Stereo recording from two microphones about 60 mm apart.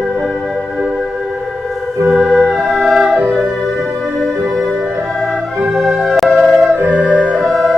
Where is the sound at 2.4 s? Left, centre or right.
Centre.